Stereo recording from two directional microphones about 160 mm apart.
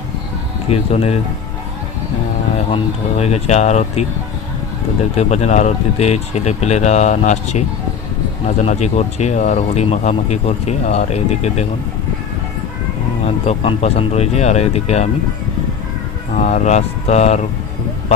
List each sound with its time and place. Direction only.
0.7 s speech: 40° left (ahead or behind)
2.5 s speech: 40° left (ahead or behind)
5.1 s speech: 45° left (ahead or behind)
8.6 s speech: 45° left (ahead or behind)
13.2 s speech: 40° left (ahead or behind)
16.3 s speech: 45° left (ahead or behind)